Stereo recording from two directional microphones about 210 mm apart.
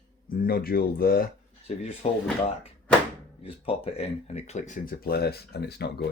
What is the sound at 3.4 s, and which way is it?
Speech, 25° left (ahead or behind).